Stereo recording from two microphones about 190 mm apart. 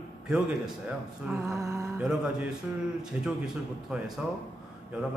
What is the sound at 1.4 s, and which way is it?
Music, 15° right (ahead or behind).